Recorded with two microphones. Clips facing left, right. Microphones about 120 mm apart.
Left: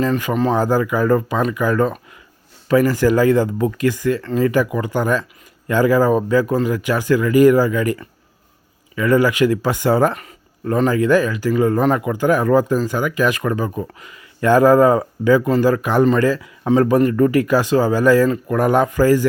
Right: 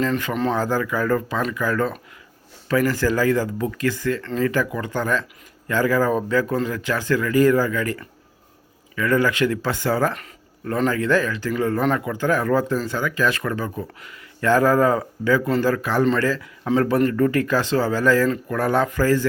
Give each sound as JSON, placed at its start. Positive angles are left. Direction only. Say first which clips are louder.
{"t": 0.0, "sound": "speech", "louder": "left 4 dB", "side_deg": 10}